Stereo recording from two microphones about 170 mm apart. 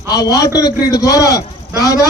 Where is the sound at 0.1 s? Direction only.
20° left (ahead or behind).